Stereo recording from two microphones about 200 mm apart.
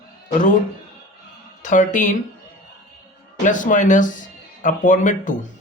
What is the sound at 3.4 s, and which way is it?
Speech, 40° left (ahead or behind).